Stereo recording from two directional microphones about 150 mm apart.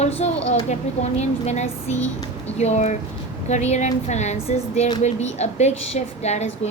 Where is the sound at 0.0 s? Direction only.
45° left (ahead or behind).